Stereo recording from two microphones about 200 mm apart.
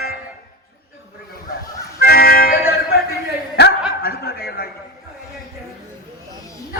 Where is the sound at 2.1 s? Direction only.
50° left (ahead or behind).